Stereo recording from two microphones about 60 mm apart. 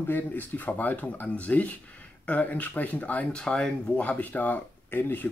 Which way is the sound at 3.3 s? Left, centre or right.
Centre.